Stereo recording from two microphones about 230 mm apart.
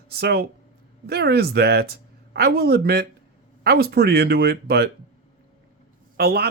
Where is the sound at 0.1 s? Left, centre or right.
Right.